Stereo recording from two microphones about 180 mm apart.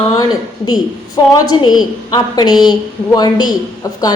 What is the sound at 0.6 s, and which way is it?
A woman's voice, 25° left (ahead or behind).